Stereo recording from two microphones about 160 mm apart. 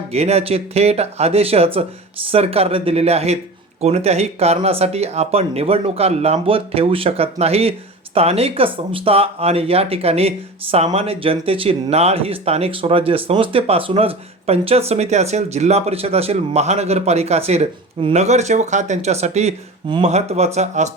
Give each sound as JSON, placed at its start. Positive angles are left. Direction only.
{"t": 0.1, "sound": "speech", "side_deg": -40}